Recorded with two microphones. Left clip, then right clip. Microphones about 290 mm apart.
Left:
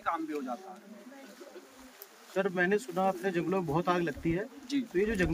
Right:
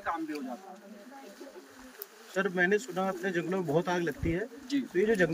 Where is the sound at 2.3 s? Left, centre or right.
Centre.